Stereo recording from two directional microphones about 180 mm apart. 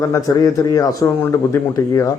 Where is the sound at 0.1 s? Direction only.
20° left (ahead or behind).